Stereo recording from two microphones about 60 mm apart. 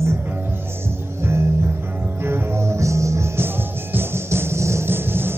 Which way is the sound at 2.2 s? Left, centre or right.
Right.